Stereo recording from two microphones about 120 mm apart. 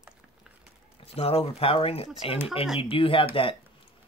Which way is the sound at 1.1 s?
55° left (ahead or behind).